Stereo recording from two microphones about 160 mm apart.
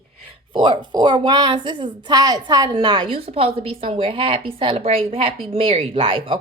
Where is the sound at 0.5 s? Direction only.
30° right (ahead or behind).